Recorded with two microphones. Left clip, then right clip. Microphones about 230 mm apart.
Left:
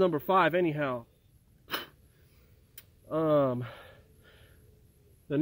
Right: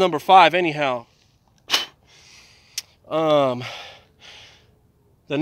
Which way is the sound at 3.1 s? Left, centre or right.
Right.